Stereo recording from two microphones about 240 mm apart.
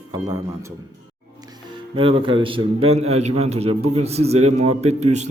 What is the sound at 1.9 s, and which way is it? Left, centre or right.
A man's voice, right.